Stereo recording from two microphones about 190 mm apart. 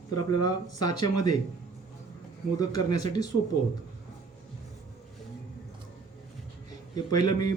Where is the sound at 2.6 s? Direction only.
20° left (ahead or behind).